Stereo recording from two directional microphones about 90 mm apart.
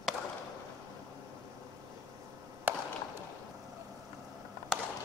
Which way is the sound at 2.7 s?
25° right (ahead or behind).